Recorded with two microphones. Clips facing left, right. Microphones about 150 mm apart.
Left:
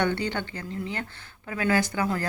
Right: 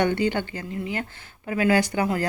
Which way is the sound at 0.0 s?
15° right (ahead or behind).